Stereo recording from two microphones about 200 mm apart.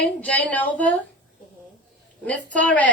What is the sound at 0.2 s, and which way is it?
Speech, 5° left (ahead or behind).